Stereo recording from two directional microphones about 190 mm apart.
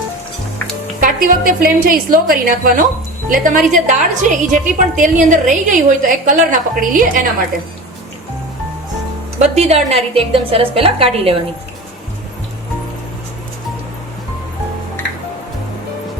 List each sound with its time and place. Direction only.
1.0 s a woman's voice: 45° right (ahead or behind)
9.4 s a woman's voice: 35° right (ahead or behind)